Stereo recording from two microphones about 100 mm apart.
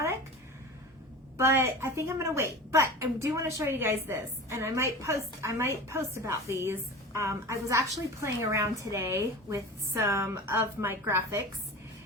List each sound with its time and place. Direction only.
1.4 s a woman's voice: 25° right (ahead or behind)